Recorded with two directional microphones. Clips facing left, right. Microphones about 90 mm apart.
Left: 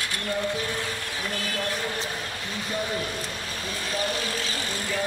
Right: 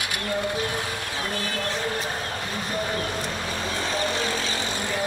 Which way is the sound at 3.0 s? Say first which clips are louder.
Right 3 dB; 40° right (ahead or behind).